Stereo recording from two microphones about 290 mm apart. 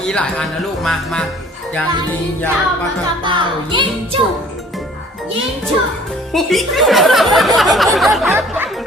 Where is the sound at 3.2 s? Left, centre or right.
Centre.